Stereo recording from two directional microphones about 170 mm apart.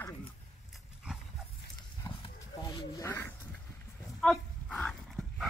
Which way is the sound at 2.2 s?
20° left (ahead or behind).